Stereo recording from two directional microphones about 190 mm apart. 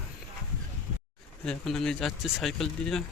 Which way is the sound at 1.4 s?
5° left (ahead or behind).